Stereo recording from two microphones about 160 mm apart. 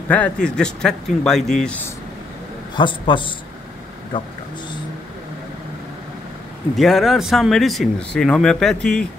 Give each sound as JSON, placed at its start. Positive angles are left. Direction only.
{"t": 0.1, "sound": "speech", "side_deg": 5}
{"t": 2.7, "sound": "a man's voice", "side_deg": 30}
{"t": 6.8, "sound": "speech", "side_deg": 0}